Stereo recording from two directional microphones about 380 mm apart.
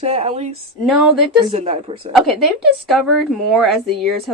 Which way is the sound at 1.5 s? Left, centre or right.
Centre.